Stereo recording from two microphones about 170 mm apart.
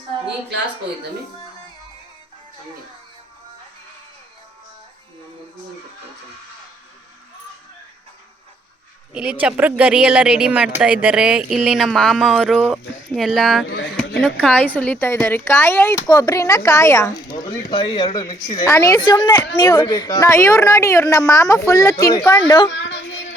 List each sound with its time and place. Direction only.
9.1 s speech: 5° right (ahead or behind)
13.7 s speech: 90° left
13.9 s a woman's voice: 5° left (ahead or behind); by 22.4 s 20° left (ahead or behind)
22.7 s a sound: 90° left